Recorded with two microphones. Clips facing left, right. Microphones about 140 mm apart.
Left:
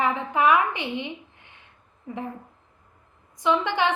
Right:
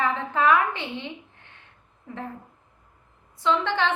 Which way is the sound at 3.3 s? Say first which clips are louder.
Left 1 dB; 15° left (ahead or behind).